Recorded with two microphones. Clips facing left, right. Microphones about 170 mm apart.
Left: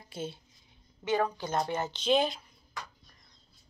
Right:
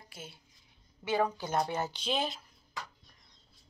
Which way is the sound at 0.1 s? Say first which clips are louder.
Left 12 dB; 25° left (ahead or behind).